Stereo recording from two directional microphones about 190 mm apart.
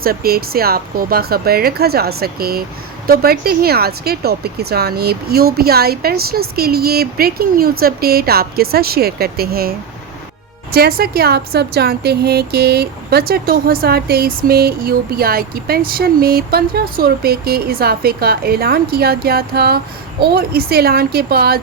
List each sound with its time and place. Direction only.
0.0 s a woman's voice: 50° right (ahead or behind)